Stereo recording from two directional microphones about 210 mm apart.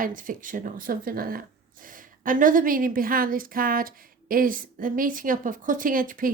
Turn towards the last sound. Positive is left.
turn(degrees=-40)  # may be behind; listen again after turning